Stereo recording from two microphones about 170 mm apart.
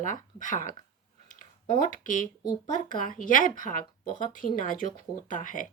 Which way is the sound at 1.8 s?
50° left (ahead or behind).